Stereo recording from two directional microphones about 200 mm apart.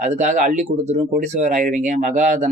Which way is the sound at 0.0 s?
35° right (ahead or behind).